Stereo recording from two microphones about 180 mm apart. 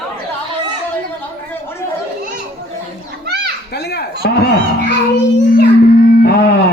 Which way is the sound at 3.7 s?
65° left (ahead or behind).